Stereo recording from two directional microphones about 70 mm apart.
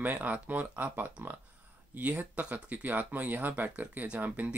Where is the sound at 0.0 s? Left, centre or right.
Right.